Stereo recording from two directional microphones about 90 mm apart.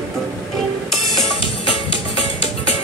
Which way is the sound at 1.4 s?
85° left.